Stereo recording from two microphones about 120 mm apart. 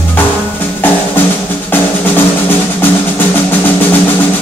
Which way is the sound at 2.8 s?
15° left (ahead or behind).